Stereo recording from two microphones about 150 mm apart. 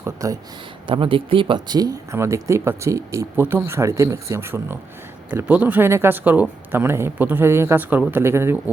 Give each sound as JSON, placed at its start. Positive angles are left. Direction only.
{"t": 0.0, "sound": "speech", "side_deg": -20}
{"t": 0.9, "sound": "speech", "side_deg": -35}